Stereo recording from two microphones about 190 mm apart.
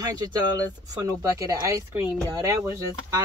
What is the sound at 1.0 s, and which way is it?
Speech, 15° right (ahead or behind).